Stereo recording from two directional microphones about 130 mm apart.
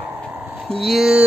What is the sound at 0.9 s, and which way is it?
Speech, 5° right (ahead or behind).